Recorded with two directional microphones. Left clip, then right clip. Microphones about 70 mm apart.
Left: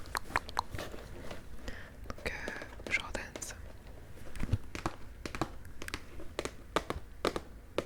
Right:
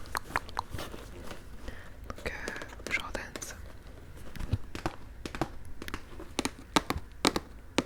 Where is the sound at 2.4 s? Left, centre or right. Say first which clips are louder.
Right 3 dB; centre.